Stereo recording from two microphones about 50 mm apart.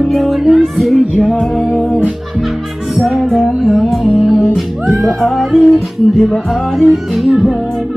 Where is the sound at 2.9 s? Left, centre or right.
Centre.